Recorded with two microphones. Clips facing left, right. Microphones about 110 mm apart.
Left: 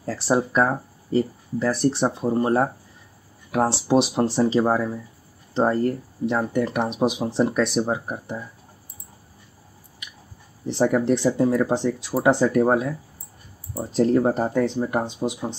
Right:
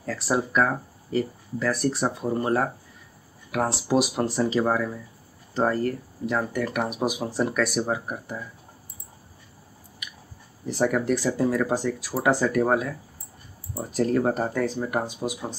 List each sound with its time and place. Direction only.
0.3 s speech: 25° left (ahead or behind)
10.7 s speech: 25° left (ahead or behind)